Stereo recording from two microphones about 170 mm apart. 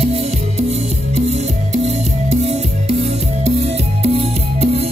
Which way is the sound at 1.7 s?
40° right (ahead or behind).